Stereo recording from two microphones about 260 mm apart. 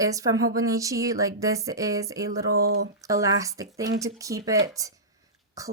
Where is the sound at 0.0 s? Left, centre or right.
Centre.